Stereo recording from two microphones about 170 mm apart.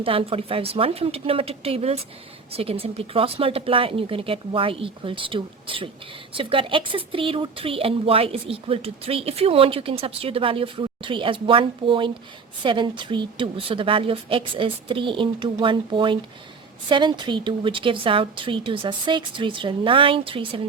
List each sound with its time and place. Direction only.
0.0 s speech: 35° right (ahead or behind)